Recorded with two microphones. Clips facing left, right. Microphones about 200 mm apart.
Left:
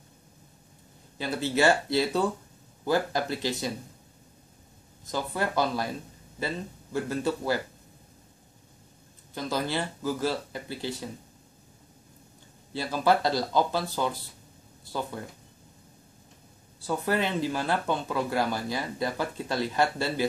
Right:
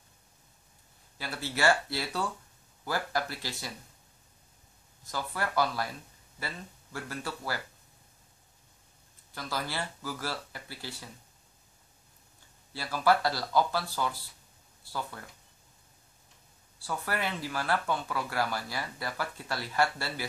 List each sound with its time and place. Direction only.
1.1 s speech: 20° left (ahead or behind)
5.0 s speech: 20° left (ahead or behind)
9.3 s speech: 20° left (ahead or behind)
12.7 s speech: 20° left (ahead or behind)
16.8 s speech: 20° left (ahead or behind)